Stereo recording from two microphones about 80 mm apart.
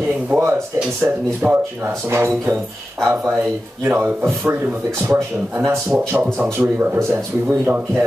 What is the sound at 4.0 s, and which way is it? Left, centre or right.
Speech, right.